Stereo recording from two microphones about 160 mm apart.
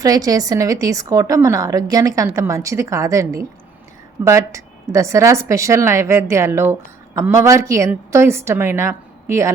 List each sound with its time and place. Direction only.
0.0 s a woman's voice: 25° right (ahead or behind)